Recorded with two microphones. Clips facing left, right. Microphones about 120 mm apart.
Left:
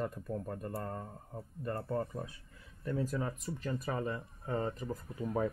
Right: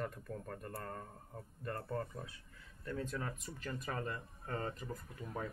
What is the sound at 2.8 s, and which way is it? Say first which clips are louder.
Speech: left 6 dB; 10° left (ahead or behind).